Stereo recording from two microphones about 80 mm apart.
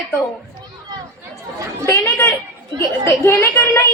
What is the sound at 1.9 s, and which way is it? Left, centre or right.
A woman's voice, left.